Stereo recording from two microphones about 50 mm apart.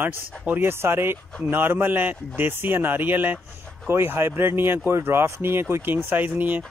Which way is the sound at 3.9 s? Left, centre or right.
Right.